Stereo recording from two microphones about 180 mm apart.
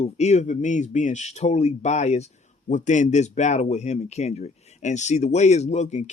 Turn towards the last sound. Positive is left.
turn(degrees=40)  # may be behind; listen again after turning